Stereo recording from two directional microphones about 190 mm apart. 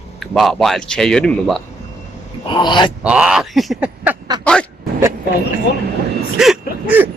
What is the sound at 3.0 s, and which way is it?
Speech, 5° right (ahead or behind).